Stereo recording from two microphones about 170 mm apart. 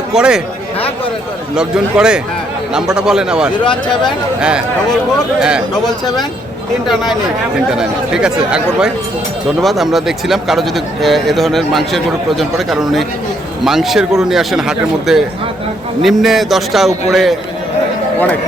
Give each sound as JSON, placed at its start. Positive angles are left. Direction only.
{"t": 0.1, "sound": "a man's voice", "side_deg": -5}
{"t": 1.5, "sound": "a man's voice", "side_deg": -5}
{"t": 3.6, "sound": "speech", "side_deg": 30}
{"t": 4.0, "sound": "a man's voice", "side_deg": -5}
{"t": 5.8, "sound": "speech", "side_deg": 25}
{"t": 7.7, "sound": "a man's voice", "side_deg": -5}